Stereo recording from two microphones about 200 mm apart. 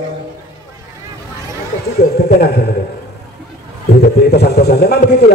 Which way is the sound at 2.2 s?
55° left (ahead or behind).